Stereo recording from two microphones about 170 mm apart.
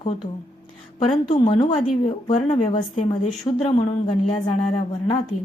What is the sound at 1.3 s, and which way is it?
A woman's voice, 35° left (ahead or behind).